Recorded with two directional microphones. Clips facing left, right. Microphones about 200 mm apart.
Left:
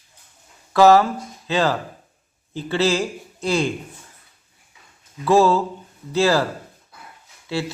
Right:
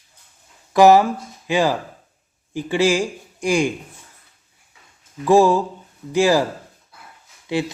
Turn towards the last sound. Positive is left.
turn(degrees=-15)  # may be behind; listen again after turning